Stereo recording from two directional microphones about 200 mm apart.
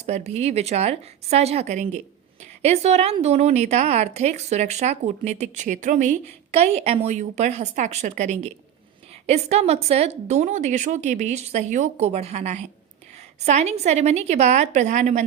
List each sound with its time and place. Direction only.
0.0 s speech: 35° right (ahead or behind)